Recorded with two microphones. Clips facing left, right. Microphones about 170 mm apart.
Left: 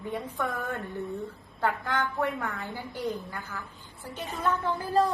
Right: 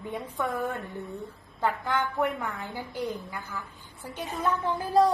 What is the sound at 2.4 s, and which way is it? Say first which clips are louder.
A woman's voice: even; 10° right (ahead or behind).